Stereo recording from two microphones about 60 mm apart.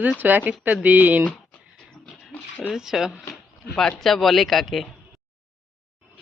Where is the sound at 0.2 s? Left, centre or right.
Right.